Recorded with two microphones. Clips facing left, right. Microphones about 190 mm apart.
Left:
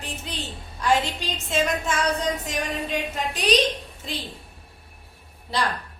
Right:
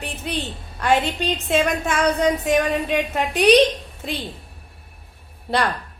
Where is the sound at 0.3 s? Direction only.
60° right (ahead or behind).